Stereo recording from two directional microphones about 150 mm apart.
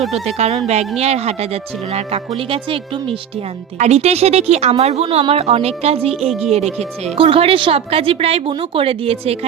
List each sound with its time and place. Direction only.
0.1 s a woman's voice: 45° right (ahead or behind)